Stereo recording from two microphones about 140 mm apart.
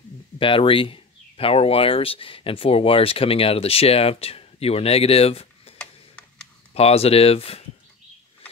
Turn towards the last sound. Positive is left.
turn(degrees=45)  # may be behind; listen again after turning